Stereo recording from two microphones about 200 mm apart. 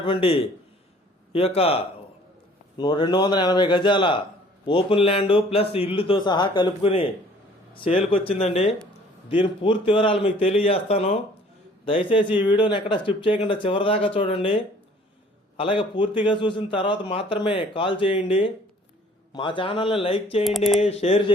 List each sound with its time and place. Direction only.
0.0 s a man's voice: 25° left (ahead or behind)